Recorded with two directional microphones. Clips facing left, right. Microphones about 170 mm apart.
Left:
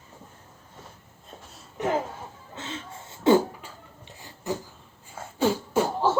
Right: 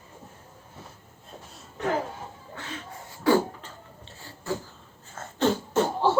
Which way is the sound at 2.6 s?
25° left (ahead or behind).